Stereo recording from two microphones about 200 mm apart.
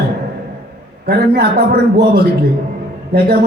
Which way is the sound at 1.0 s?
50° right (ahead or behind).